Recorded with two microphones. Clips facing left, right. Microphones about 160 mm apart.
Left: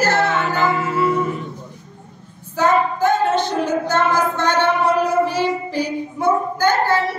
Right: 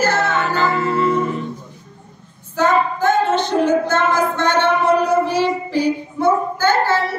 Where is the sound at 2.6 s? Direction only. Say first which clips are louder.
Even; 10° left (ahead or behind).